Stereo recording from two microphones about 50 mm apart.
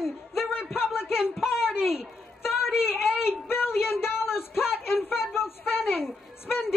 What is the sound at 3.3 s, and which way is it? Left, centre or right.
A woman's voice, left.